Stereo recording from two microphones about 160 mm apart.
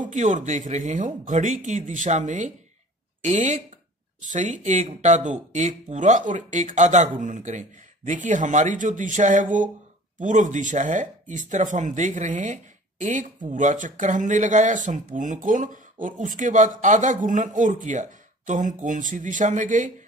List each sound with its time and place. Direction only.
0.1 s speech: 50° right (ahead or behind)